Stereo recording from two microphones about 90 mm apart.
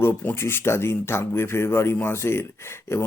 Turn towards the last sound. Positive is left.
turn(degrees=30)  # may be behind; listen again after turning